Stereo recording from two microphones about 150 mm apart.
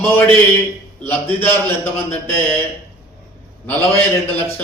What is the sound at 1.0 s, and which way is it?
A man's voice, 15° left (ahead or behind).